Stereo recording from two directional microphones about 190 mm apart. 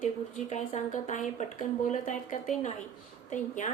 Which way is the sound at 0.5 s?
40° left (ahead or behind).